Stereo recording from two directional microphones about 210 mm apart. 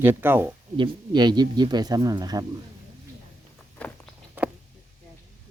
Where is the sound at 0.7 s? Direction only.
20° right (ahead or behind).